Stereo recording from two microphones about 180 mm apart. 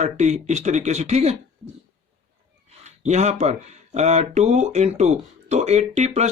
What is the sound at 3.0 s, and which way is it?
Speech, 40° right (ahead or behind).